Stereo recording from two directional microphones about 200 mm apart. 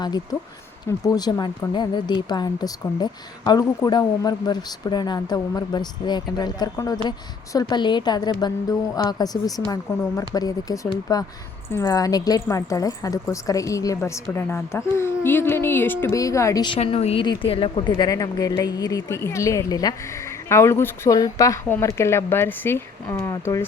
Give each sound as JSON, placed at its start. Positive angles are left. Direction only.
{"t": 0.9, "sound": "a woman's voice", "side_deg": 20}